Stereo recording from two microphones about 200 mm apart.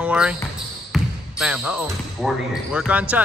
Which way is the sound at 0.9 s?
Centre (ahead or behind).